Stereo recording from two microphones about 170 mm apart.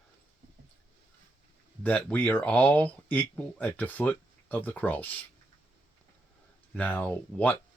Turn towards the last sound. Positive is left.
turn(degrees=10)  # may be behind; listen again after turning